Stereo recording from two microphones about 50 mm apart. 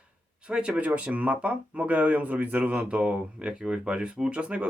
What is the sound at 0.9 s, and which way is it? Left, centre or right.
Speech, right.